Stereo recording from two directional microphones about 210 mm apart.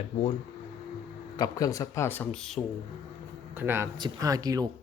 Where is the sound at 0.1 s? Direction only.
35° left (ahead or behind).